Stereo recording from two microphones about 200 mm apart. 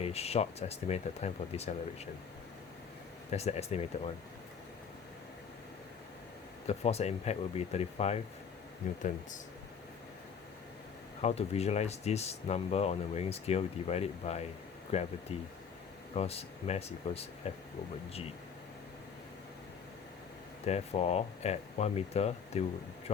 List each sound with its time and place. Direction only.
0.0 s speech: 30° left (ahead or behind)
3.2 s speech: 30° left (ahead or behind)
6.7 s speech: 30° left (ahead or behind)
11.2 s speech: 30° left (ahead or behind)
16.1 s speech: 30° left (ahead or behind)
20.7 s speech: 30° left (ahead or behind)